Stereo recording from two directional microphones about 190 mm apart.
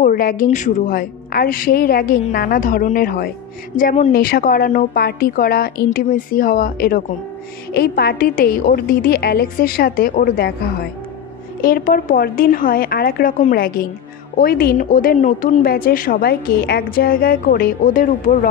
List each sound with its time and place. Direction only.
0.0 s a woman's voice: 50° left (ahead or behind)